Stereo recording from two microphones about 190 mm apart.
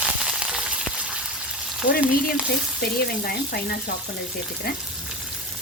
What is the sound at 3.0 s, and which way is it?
Speech, 55° left (ahead or behind).